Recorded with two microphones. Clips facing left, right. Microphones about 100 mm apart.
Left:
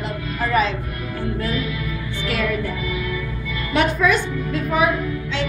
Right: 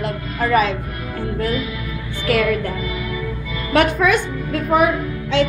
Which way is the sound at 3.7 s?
55° right (ahead or behind).